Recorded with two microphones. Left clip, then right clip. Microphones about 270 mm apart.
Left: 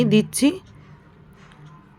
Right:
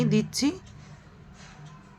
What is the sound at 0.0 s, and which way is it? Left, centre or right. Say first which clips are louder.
Speech: left 7 dB; centre.